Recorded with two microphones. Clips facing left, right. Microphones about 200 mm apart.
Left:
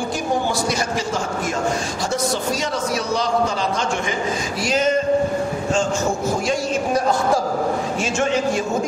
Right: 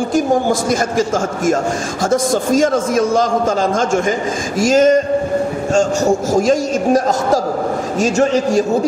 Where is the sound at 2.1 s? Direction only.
50° right (ahead or behind).